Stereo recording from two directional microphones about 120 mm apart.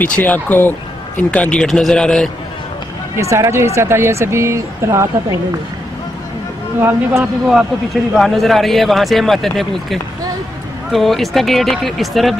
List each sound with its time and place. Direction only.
0.0 s speech: 15° left (ahead or behind)
3.2 s speech: 25° right (ahead or behind)
6.8 s speech: 20° right (ahead or behind)
7.4 s a man's voice: centre (ahead or behind)